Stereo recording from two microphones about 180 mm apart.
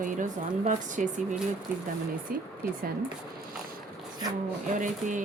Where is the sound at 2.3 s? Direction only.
55° right (ahead or behind).